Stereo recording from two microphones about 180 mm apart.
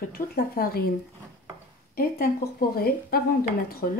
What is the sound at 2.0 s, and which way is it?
Speech, 55° left (ahead or behind).